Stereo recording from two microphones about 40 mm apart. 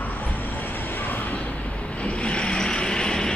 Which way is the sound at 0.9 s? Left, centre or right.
Left.